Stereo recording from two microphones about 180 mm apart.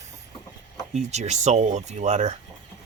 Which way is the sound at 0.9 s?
40° right (ahead or behind).